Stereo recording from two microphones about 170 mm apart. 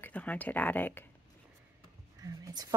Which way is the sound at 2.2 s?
20° right (ahead or behind).